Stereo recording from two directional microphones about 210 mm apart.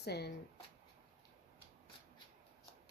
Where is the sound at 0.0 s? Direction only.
50° left (ahead or behind).